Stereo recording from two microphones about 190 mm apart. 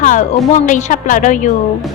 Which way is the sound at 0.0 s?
45° left (ahead or behind).